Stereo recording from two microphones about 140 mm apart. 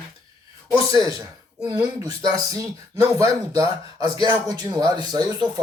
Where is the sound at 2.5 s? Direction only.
25° right (ahead or behind).